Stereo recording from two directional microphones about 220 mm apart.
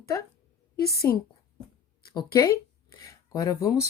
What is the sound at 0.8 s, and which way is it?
Speech, 45° left (ahead or behind).